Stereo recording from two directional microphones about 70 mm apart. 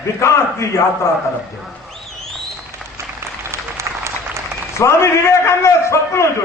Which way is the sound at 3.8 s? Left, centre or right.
Right.